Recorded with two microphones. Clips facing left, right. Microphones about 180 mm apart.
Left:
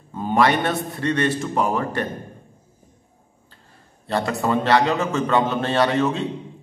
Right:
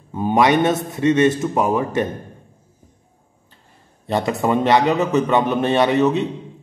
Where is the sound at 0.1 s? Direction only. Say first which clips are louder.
Right 3 dB; 15° right (ahead or behind).